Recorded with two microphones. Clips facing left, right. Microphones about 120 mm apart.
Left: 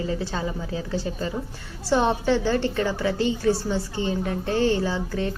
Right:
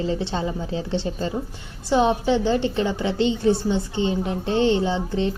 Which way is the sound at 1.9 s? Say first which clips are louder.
Right 2 dB; 15° right (ahead or behind).